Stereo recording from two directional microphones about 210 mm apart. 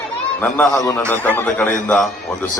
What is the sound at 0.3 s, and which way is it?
A man's voice, 10° left (ahead or behind).